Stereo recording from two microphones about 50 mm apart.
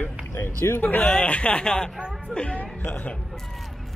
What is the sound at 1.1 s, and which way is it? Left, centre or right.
Speech, left.